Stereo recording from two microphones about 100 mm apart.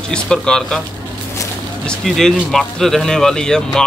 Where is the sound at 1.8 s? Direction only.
5° left (ahead or behind).